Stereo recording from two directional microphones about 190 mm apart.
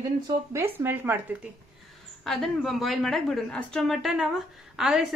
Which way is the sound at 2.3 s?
Centre (ahead or behind).